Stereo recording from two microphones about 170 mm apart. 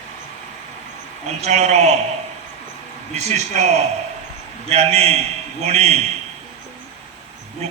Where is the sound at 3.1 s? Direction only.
40° right (ahead or behind).